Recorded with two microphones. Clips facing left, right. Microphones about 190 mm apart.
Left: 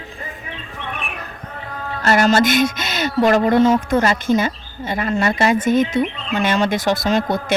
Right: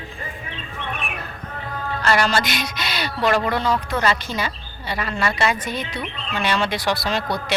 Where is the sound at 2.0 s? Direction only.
45° left (ahead or behind).